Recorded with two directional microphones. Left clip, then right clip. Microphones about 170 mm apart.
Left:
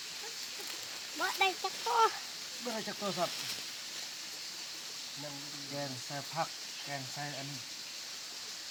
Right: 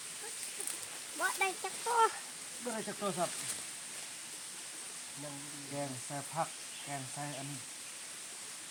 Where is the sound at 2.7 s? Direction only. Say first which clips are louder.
Even; 10° left (ahead or behind).